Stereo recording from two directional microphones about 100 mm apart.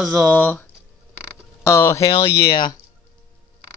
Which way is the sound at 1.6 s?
25° left (ahead or behind).